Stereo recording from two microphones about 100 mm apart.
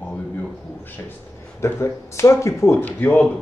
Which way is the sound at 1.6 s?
25° left (ahead or behind).